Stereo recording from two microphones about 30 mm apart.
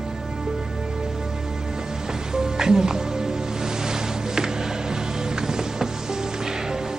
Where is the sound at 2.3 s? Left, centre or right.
Right.